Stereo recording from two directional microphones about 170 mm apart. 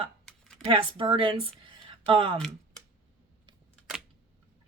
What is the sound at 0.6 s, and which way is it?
Speech, 35° right (ahead or behind).